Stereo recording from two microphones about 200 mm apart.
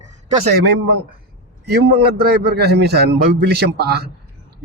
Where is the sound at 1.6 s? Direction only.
55° right (ahead or behind).